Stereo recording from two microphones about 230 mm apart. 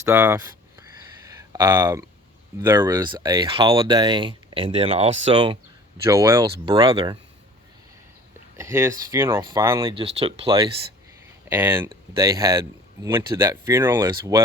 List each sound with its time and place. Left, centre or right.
0.0 s a sound: centre
2.6 s speech: centre
8.5 s speech: centre
9.8 s speech: right